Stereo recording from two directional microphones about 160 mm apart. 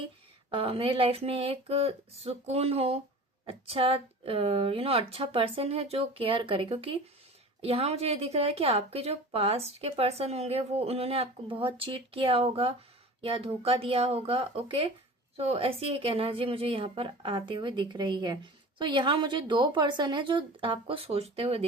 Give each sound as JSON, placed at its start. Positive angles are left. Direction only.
{"t": 0.5, "sound": "a woman's voice", "side_deg": -35}